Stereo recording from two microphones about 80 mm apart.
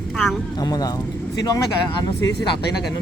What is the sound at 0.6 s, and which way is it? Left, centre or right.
Speech, left.